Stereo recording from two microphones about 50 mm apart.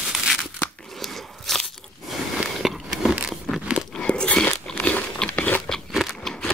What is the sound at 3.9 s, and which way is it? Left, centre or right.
Biting, left.